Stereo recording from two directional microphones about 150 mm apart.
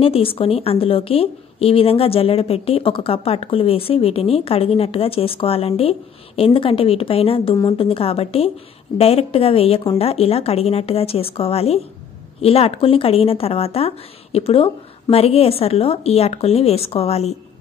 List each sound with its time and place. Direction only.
0.0 s a woman's voice: 40° left (ahead or behind)